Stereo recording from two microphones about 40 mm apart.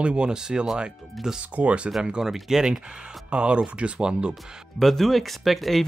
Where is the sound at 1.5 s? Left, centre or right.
Right.